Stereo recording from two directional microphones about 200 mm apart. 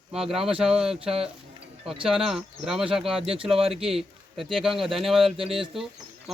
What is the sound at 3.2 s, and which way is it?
Speech, 25° right (ahead or behind).